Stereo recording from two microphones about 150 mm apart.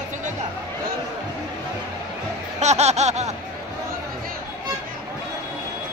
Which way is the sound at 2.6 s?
50° right (ahead or behind).